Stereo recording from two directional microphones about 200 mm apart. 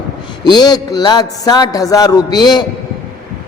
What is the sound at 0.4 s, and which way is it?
A man's voice, 20° left (ahead or behind).